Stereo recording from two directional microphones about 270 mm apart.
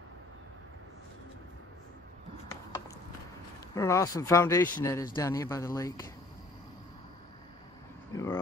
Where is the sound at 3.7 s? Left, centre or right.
Centre.